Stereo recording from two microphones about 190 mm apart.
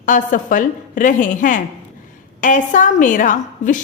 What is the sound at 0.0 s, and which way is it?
A woman's voice, 45° left (ahead or behind).